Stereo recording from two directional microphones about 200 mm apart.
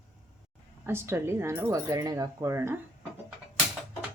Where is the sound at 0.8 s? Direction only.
10° right (ahead or behind).